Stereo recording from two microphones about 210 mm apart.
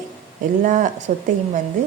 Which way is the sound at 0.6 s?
35° right (ahead or behind).